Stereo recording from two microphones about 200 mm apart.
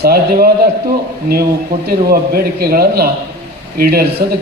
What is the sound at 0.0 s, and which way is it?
Speech, 50° right (ahead or behind).